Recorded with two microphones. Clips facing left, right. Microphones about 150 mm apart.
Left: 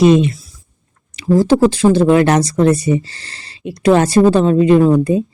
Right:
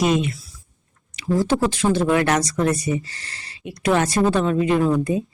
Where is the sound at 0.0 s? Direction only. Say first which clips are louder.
Left 9 dB; 30° left (ahead or behind).